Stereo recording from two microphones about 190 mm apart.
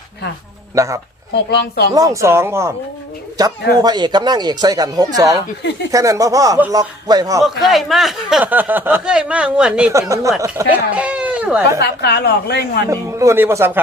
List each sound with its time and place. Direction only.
0.8 s speech: 15° right (ahead or behind)
1.5 s a woman's voice: 60° left (ahead or behind)
1.9 s speech: 20° right (ahead or behind)
7.6 s speech: centre (ahead or behind)
9.9 s speech: 15° right (ahead or behind)
11.8 s a woman's voice: 60° left (ahead or behind)
12.9 s speech: 15° right (ahead or behind)